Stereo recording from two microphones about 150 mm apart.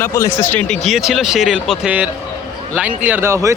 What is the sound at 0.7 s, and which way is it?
Speech, centre (ahead or behind).